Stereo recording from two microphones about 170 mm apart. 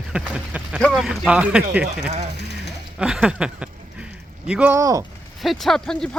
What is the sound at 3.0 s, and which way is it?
Speech, 5° right (ahead or behind).